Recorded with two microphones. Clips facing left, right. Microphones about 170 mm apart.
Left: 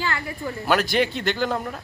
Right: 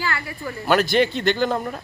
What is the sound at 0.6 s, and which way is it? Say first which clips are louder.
Speech: right 3 dB; 5° left (ahead or behind).